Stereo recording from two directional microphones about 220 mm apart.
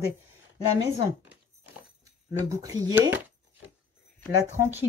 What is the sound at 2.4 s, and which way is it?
Speech, 15° right (ahead or behind).